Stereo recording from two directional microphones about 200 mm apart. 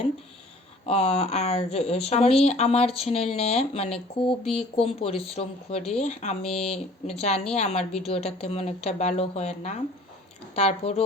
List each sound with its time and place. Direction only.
0.9 s speech: 30° left (ahead or behind)